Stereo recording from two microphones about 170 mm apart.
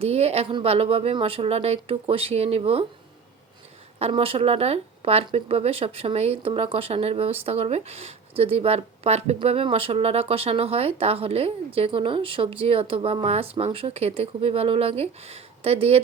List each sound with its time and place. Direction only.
0.0 s speech: 40° right (ahead or behind)
4.0 s speech: 35° right (ahead or behind)